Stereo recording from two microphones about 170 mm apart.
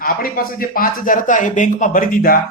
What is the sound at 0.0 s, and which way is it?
Speech, 60° left (ahead or behind).